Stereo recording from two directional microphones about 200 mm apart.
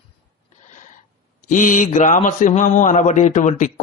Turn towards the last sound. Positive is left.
turn(degrees=40)  # may be behind; listen again after turning